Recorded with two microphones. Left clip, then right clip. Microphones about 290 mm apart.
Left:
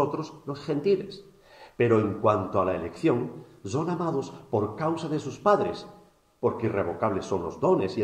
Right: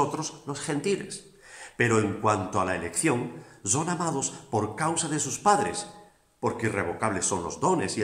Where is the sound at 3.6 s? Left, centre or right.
Right.